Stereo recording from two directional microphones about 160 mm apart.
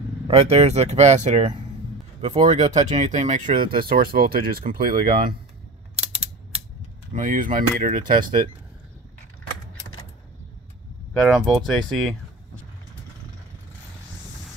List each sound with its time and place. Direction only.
0.3 s speech: 40° right (ahead or behind); by 5.1 s 60° right (ahead or behind)
7.1 s speech: 55° right (ahead or behind)
11.1 s speech: centre (ahead or behind)